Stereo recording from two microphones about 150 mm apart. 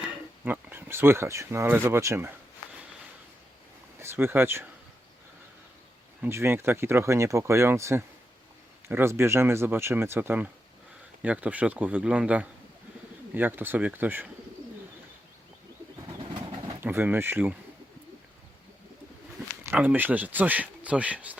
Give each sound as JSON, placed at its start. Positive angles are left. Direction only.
{"t": 0.4, "sound": "speech", "side_deg": -15}
{"t": 3.9, "sound": "speech", "side_deg": -15}
{"t": 6.2, "sound": "speech", "side_deg": -15}
{"t": 16.8, "sound": "speech", "side_deg": -15}
{"t": 19.6, "sound": "speech", "side_deg": -15}